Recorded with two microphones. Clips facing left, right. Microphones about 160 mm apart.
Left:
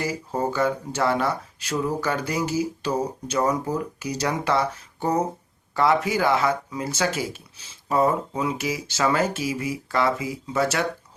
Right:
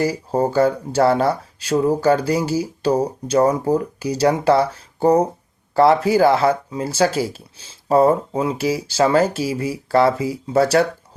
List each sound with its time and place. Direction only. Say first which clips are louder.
0.0 s speech: right 7 dB; 35° right (ahead or behind)